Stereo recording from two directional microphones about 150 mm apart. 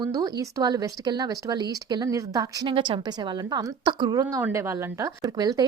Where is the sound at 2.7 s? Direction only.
35° right (ahead or behind).